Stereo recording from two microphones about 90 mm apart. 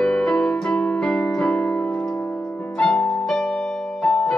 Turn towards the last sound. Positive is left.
turn(degrees=10)  # may be behind; listen again after turning